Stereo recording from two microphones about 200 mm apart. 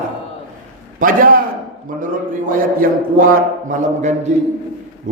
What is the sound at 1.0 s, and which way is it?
A man's voice, 45° right (ahead or behind).